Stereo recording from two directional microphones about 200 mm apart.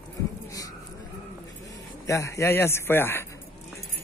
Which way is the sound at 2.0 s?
15° left (ahead or behind).